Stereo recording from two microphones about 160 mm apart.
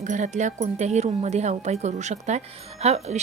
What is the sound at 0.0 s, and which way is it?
Speech, 50° right (ahead or behind).